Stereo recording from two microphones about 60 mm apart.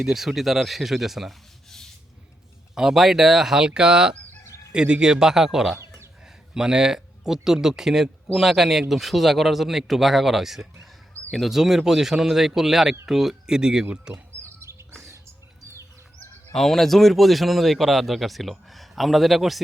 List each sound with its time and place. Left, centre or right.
0.0 s speech: centre
2.7 s speech: centre
14.1 s chirp: right
16.5 s speech: centre